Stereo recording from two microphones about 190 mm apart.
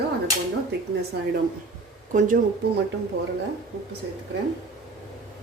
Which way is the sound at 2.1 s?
45° right (ahead or behind).